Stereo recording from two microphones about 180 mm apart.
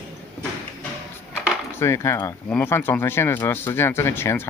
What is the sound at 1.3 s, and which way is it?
Cutlery, 15° left (ahead or behind).